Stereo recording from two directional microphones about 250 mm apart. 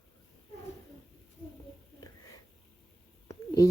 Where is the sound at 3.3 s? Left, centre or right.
Centre.